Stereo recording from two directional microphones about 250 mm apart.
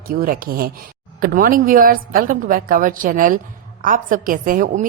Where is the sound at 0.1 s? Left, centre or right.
Right.